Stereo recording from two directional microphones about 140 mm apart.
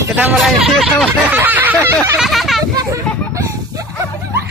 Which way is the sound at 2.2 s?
Centre (ahead or behind).